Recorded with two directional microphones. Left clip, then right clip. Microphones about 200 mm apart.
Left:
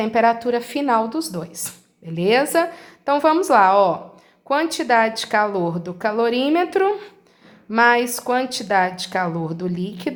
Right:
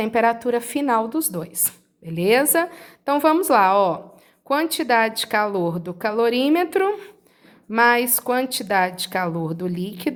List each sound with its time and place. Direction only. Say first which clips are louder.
0.0 s a woman's voice: left 2 dB; 30° right (ahead or behind)